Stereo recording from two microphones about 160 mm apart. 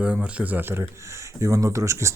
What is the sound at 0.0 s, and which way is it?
Speech, 10° right (ahead or behind).